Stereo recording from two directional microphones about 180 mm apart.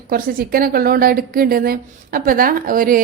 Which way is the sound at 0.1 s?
55° right (ahead or behind).